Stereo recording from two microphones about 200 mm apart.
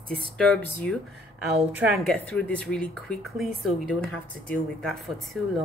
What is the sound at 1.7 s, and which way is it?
Speech, 10° right (ahead or behind).